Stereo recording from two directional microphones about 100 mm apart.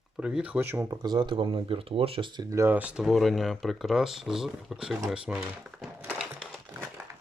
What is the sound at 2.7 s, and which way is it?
Speech, 15° right (ahead or behind).